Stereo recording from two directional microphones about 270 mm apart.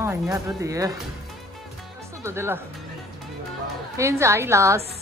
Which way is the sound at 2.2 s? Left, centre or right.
Centre.